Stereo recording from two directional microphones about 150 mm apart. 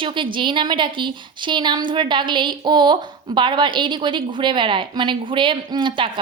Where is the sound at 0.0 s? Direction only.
35° right (ahead or behind).